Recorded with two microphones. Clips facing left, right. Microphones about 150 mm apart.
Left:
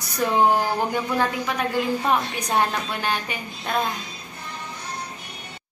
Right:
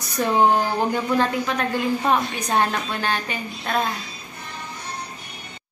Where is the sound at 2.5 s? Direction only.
15° left (ahead or behind).